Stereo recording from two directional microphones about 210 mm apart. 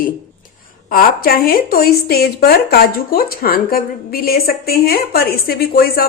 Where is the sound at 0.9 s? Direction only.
45° left (ahead or behind).